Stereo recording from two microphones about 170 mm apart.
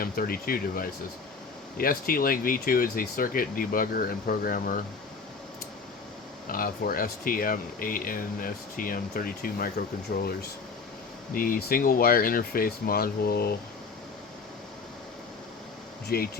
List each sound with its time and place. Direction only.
0.0 s speech: 60° left (ahead or behind)
6.5 s speech: 55° left (ahead or behind)
10.1 s speech: 70° left (ahead or behind)
11.3 s speech: 55° left (ahead or behind)
16.0 s speech: 65° left (ahead or behind)